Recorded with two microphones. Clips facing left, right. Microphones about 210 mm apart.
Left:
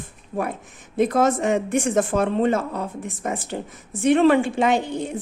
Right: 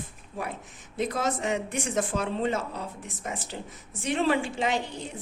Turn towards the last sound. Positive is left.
turn(degrees=55)  # may be behind; listen again after turning